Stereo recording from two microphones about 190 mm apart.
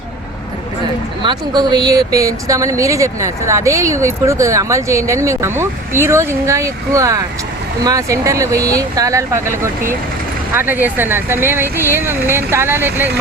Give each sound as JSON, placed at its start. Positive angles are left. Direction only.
{"t": 1.2, "sound": "speech", "side_deg": -25}